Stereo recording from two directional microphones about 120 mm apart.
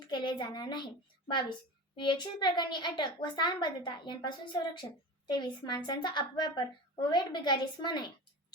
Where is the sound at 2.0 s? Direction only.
40° left (ahead or behind).